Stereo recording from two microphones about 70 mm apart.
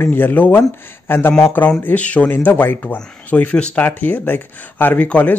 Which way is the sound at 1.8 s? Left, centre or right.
Centre.